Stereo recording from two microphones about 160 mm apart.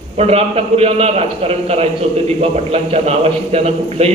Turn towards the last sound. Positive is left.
turn(degrees=-40)  # may be behind; listen again after turning